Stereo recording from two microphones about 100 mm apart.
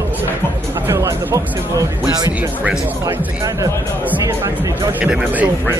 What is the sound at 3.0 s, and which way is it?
Speech, 35° right (ahead or behind).